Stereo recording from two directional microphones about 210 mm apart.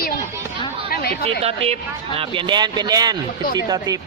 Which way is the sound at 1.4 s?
30° right (ahead or behind).